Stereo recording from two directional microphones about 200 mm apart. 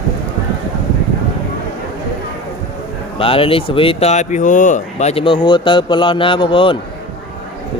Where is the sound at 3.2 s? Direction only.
25° left (ahead or behind).